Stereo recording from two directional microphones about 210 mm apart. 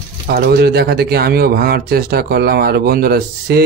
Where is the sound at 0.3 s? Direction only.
50° right (ahead or behind).